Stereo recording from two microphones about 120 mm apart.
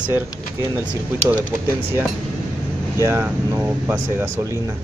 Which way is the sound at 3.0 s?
20° right (ahead or behind).